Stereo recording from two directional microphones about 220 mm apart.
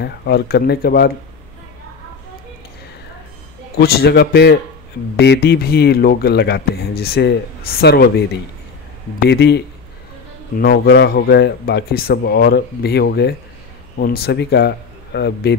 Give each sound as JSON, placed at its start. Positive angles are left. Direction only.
{"t": 0.0, "sound": "speech", "side_deg": 45}
{"t": 3.8, "sound": "speech", "side_deg": 45}
{"t": 10.6, "sound": "speech", "side_deg": 45}